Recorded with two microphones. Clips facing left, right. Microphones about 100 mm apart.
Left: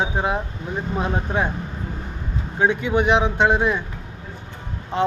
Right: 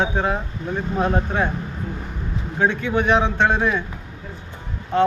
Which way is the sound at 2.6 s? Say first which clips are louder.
Left 1 dB; 15° left (ahead or behind).